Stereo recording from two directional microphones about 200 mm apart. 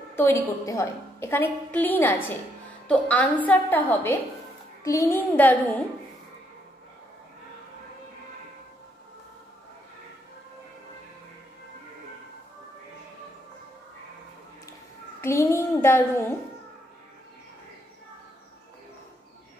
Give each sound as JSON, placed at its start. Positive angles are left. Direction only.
{"t": 0.1, "sound": "a woman's voice", "side_deg": 10}
{"t": 15.2, "sound": "a woman's voice", "side_deg": 15}